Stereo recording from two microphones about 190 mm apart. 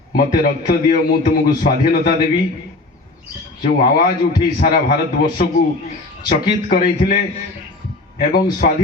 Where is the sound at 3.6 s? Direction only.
50° left (ahead or behind).